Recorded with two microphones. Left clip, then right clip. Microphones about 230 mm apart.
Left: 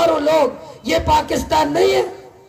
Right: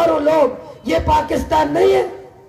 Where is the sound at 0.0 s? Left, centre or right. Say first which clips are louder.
Right 1 dB; left.